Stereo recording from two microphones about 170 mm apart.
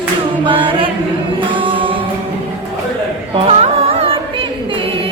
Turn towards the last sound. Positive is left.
turn(degrees=-35)  # may be behind; listen again after turning